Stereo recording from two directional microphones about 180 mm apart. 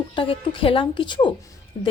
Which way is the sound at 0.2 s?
30° left (ahead or behind).